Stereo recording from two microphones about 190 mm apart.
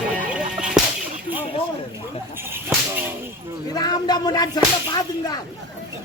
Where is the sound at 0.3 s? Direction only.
5° right (ahead or behind).